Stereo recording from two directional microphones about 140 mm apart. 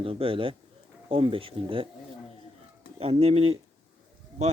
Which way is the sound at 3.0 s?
45° right (ahead or behind).